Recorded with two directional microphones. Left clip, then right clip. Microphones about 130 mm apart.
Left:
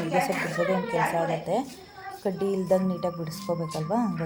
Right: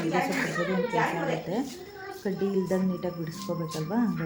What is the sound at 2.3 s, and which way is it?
Speech, 25° left (ahead or behind).